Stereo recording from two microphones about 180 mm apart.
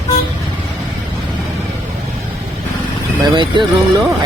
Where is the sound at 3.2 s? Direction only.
25° right (ahead or behind).